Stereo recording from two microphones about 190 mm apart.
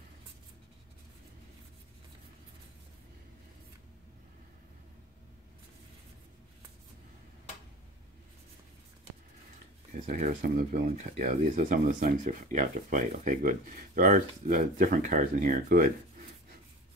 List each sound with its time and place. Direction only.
10.0 s speech: 45° right (ahead or behind)